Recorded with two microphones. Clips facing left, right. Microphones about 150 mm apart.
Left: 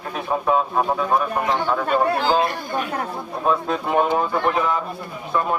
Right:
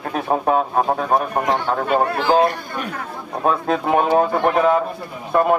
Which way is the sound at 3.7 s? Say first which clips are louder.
Right 3 dB; 55° right (ahead or behind).